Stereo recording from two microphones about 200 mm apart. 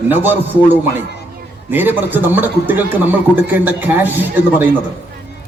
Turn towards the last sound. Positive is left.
turn(degrees=-10)  # may be behind; listen again after turning